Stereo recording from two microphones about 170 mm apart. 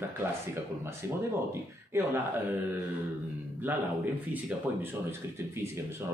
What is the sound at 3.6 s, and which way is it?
A man's voice, 10° right (ahead or behind).